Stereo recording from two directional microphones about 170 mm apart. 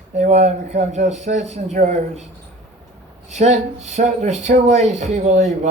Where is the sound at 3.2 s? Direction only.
40° right (ahead or behind).